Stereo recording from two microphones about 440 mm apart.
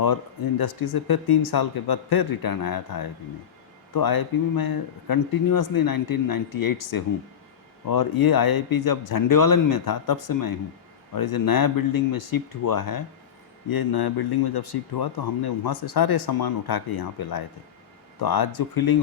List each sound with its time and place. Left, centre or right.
0.6 s speech: left